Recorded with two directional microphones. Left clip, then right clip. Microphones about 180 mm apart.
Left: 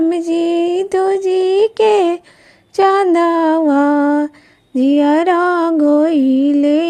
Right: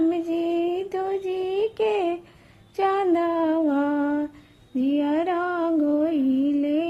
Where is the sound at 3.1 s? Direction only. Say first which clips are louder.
Left 9 dB; 40° left (ahead or behind).